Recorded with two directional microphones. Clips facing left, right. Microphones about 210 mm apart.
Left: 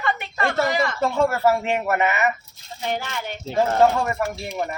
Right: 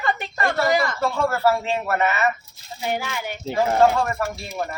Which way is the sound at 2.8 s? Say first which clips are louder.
Right 1 dB; 10° right (ahead or behind).